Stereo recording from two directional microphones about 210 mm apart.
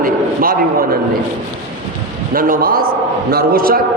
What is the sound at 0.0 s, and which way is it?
Speech, 45° right (ahead or behind).